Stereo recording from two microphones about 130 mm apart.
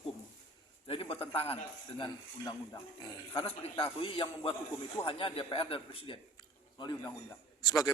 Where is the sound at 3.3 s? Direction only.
45° left (ahead or behind).